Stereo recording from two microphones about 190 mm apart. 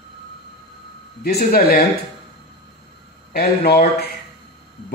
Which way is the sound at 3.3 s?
55° left (ahead or behind).